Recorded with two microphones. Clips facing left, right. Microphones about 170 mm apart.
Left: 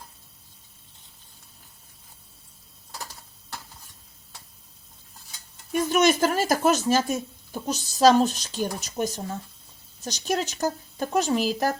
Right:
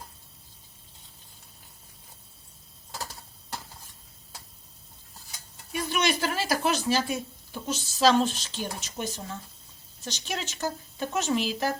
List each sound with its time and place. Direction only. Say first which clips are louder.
5.7 s speech: left 7 dB; 45° left (ahead or behind)